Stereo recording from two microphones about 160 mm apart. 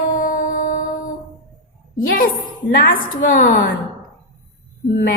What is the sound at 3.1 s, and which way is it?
Speech, 60° left (ahead or behind).